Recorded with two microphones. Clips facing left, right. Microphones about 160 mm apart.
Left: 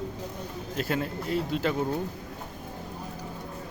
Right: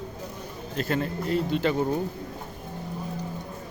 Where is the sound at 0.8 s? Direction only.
5° left (ahead or behind).